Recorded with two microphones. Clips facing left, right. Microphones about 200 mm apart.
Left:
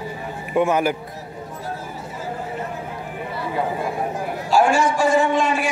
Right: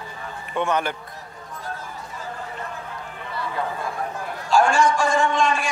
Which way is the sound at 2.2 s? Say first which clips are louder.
Left 6 dB; 15° left (ahead or behind).